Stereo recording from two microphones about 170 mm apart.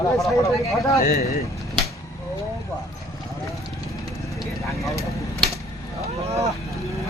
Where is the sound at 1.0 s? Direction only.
60° left (ahead or behind).